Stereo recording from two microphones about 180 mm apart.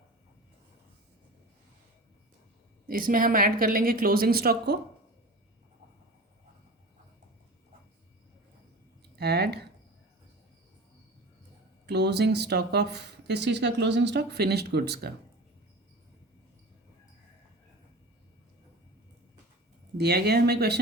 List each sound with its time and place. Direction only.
2.8 s speech: 50° right (ahead or behind)
9.1 s a sound: 65° right (ahead or behind)
11.9 s speech: 65° right (ahead or behind)
20.0 s speech: 60° right (ahead or behind)